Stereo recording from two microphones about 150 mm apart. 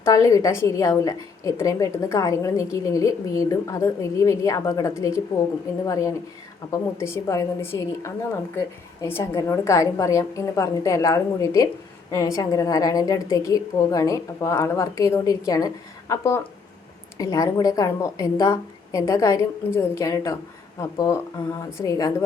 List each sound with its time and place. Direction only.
0.0 s a woman's voice: 20° left (ahead or behind)